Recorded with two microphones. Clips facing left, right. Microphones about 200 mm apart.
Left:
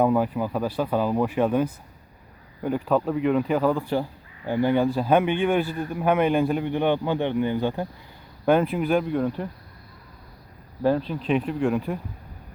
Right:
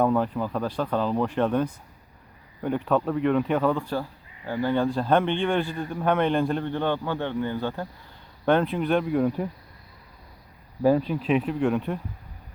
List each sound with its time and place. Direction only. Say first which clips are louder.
0.0 s a man's voice: left 2 dB; 10° left (ahead or behind)
4.4 s a man's voice: left 3 dB; 20° left (ahead or behind)
8.4 s speech: left 2 dB; 5° left (ahead or behind)
10.8 s speech: right 1 dB; 5° right (ahead or behind)